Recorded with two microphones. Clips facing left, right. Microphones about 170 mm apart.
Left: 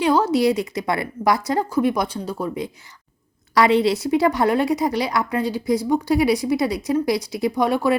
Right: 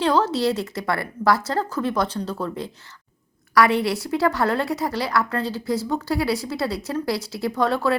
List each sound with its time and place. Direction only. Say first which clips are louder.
0.0 s speech: left 3 dB; 10° left (ahead or behind)